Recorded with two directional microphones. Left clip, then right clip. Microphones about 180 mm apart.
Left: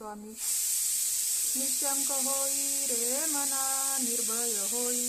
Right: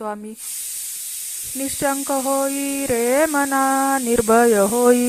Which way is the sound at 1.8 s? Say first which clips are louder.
Right 17 dB; 45° right (ahead or behind).